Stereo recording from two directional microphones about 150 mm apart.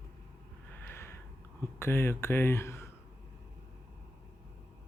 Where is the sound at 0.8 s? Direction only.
15° left (ahead or behind).